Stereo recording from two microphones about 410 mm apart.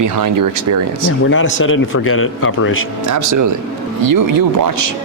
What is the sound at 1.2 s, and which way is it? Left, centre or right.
A man's voice, left.